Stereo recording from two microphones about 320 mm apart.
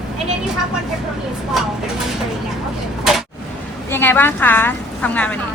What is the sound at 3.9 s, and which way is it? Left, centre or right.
A woman's voice, centre.